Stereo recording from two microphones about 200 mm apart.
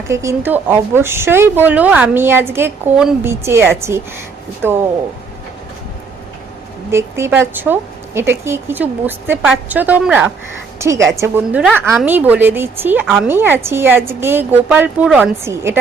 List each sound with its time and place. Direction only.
0.1 s a woman's voice: 15° right (ahead or behind)
6.9 s a woman's voice: 10° right (ahead or behind)